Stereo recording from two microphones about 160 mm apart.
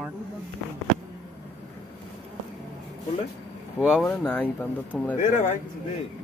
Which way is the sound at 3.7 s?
15° left (ahead or behind).